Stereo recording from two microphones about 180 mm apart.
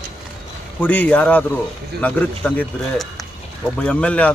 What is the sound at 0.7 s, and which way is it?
Speech, 10° left (ahead or behind).